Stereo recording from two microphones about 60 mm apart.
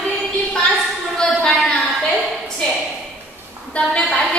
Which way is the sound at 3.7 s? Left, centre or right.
Left.